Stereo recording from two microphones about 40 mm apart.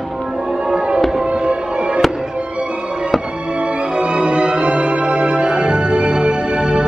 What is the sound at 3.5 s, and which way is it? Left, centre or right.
Music, right.